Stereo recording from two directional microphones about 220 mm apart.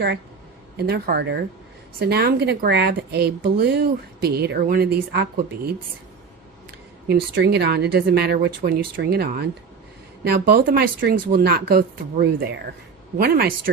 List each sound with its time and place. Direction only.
0.8 s speech: 45° right (ahead or behind)
7.1 s speech: 50° right (ahead or behind)